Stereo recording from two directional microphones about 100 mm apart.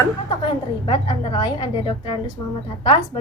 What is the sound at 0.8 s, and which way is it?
A woman's voice, 55° left (ahead or behind).